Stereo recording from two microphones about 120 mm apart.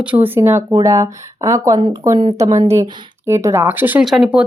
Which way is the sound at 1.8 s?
45° right (ahead or behind).